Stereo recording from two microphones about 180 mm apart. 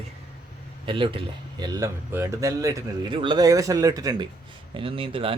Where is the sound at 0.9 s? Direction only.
30° right (ahead or behind).